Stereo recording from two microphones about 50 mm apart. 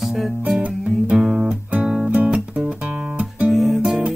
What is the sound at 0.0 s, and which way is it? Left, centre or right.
Music, centre.